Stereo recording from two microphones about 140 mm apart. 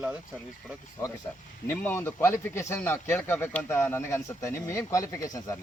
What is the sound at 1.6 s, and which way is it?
A man's voice, 15° left (ahead or behind).